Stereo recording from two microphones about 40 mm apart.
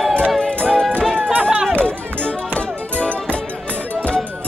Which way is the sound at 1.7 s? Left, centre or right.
Left.